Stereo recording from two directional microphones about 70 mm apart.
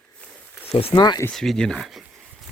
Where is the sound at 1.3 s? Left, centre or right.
Centre.